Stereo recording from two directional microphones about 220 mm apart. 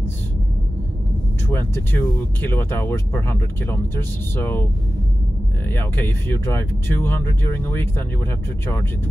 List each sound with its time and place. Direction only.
1.5 s speech: 10° left (ahead or behind)
5.7 s speech: 10° left (ahead or behind)